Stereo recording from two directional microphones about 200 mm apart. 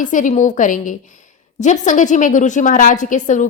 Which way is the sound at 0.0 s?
40° left (ahead or behind).